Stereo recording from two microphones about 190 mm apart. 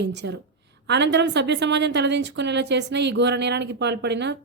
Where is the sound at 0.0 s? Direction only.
65° right (ahead or behind).